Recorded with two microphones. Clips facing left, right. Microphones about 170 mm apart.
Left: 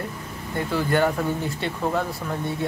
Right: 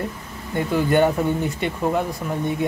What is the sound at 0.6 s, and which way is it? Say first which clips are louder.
Speech: right 4 dB; 20° right (ahead or behind).